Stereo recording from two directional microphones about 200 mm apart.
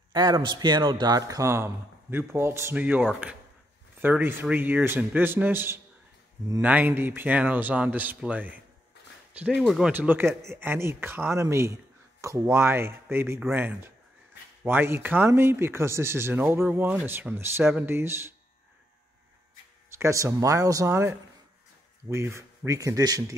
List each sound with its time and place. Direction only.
0.1 s speech: 20° right (ahead or behind)
19.9 s speech: 15° right (ahead or behind)